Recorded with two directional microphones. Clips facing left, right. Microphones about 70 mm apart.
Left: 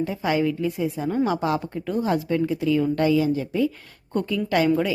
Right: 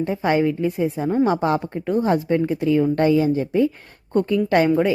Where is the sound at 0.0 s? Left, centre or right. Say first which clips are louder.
Right 3 dB; right.